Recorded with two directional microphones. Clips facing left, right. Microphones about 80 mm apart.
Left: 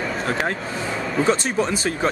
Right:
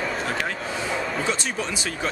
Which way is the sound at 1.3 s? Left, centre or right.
Left.